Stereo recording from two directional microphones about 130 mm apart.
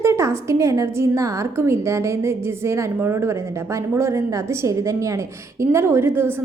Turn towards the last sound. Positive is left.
turn(degrees=-20)  # may be behind; listen again after turning